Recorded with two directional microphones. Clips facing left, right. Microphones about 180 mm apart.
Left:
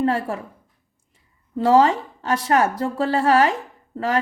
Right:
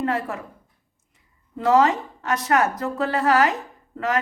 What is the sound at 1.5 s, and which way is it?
A woman's voice, 30° left (ahead or behind).